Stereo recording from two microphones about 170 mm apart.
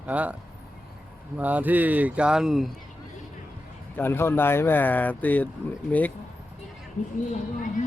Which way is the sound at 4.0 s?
15° left (ahead or behind).